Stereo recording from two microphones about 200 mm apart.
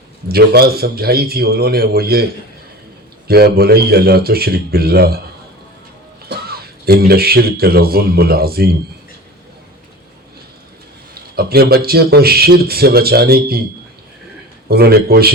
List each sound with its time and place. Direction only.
0.3 s a man's voice: 50° right (ahead or behind)
3.2 s a man's voice: 50° right (ahead or behind)
6.2 s speech: 50° right (ahead or behind)
11.1 s a man's voice: 50° right (ahead or behind)
14.7 s a man's voice: 50° right (ahead or behind)